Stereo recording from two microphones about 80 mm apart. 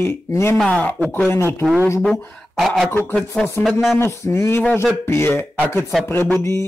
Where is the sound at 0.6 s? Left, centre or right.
Centre.